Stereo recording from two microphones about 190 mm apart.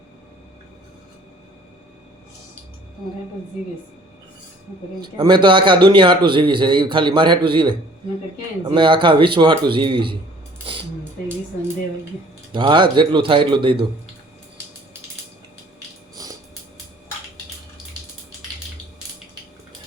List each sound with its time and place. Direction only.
5.1 s a man's voice: 25° right (ahead or behind)
12.5 s a man's voice: 25° right (ahead or behind)
16.2 s a sound: 20° right (ahead or behind)